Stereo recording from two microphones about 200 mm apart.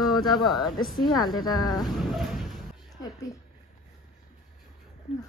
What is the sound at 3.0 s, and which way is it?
Speech, 15° left (ahead or behind).